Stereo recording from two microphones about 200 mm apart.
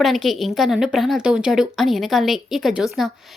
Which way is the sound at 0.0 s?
Centre (ahead or behind).